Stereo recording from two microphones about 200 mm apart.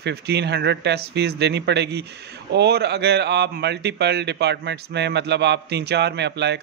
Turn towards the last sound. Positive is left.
turn(degrees=-60)  # may be behind; listen again after turning